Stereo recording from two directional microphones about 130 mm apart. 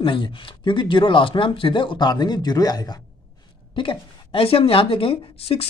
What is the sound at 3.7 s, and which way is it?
Speech, 40° left (ahead or behind).